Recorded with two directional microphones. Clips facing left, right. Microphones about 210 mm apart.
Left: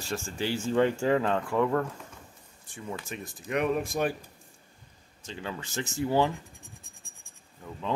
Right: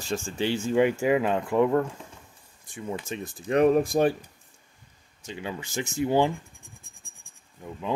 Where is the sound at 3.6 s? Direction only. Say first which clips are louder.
Right 8 dB; 35° right (ahead or behind).